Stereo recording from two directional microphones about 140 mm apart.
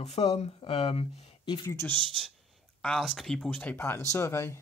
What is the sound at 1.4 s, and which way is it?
Speech, 35° left (ahead or behind).